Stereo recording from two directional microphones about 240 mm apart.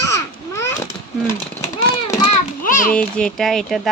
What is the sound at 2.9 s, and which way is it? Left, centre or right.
Speech, centre.